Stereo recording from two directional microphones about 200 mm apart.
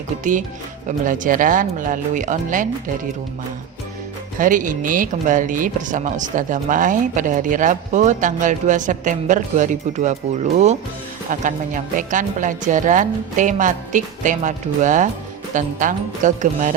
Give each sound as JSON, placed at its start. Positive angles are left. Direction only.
{"t": 0.9, "sound": "speech", "side_deg": -40}
{"t": 4.4, "sound": "speech", "side_deg": -40}